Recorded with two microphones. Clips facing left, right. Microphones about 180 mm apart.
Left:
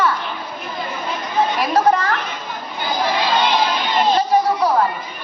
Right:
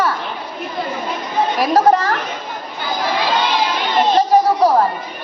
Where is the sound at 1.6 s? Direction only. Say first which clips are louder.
Right 5 dB; 40° right (ahead or behind).